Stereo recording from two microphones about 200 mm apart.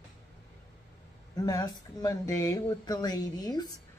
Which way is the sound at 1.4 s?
20° left (ahead or behind).